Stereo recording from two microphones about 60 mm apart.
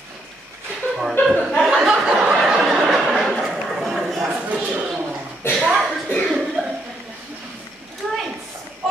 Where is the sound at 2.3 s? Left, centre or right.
Centre.